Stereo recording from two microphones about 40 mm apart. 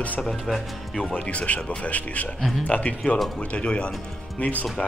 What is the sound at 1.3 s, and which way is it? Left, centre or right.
A man's voice, left.